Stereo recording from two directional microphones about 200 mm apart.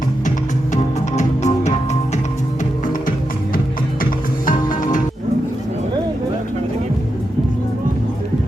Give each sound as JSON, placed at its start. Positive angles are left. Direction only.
{"t": 0.3, "sound": "music", "side_deg": 35}
{"t": 4.4, "sound": "music", "side_deg": 40}